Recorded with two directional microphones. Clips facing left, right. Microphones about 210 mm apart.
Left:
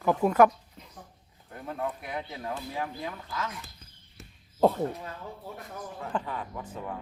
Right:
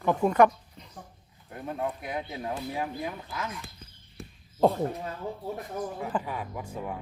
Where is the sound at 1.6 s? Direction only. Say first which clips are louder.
Right 2 dB; 15° right (ahead or behind).